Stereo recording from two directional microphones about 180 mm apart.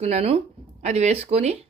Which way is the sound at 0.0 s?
35° right (ahead or behind).